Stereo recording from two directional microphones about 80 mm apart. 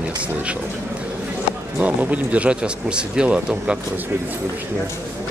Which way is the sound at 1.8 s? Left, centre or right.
Centre.